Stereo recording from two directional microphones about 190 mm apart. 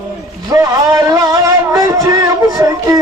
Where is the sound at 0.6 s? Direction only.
15° right (ahead or behind).